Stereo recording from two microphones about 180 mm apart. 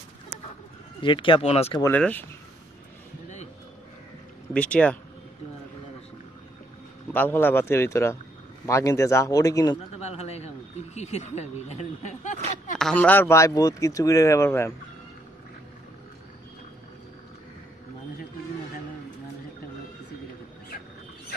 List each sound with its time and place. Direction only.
1.0 s speech: 25° left (ahead or behind)
1.8 s speech: 10° left (ahead or behind)
4.6 s speech: 5° left (ahead or behind)
7.1 s speech: 10° left (ahead or behind)
9.9 s a sound: 35° left (ahead or behind)
11.0 s speech: 40° left (ahead or behind)
12.7 s speech: 5° left (ahead or behind)